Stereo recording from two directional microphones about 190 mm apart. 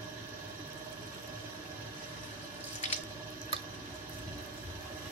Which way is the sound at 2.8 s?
35° left (ahead or behind).